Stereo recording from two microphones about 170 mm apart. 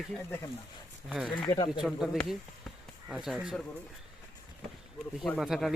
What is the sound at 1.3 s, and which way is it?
Speech, 30° left (ahead or behind).